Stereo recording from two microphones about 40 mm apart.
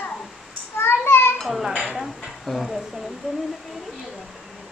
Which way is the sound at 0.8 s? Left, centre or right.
Left.